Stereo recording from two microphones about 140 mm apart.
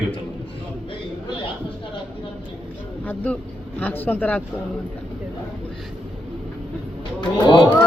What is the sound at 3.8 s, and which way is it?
Speech, 15° left (ahead or behind).